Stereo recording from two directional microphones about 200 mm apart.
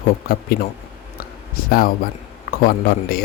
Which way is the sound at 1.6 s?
45° left (ahead or behind).